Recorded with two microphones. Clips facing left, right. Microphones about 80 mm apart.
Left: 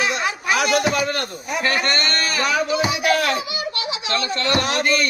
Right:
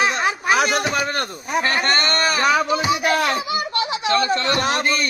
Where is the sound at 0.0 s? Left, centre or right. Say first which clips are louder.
Right 2 dB; right.